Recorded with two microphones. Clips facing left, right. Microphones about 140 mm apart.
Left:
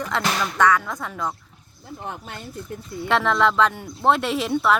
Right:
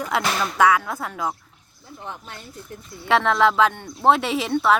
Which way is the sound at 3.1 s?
Centre (ahead or behind).